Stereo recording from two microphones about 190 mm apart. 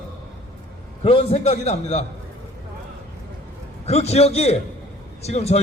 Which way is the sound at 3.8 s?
35° left (ahead or behind).